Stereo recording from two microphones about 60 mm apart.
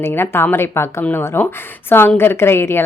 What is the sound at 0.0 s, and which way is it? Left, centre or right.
A woman's voice, left.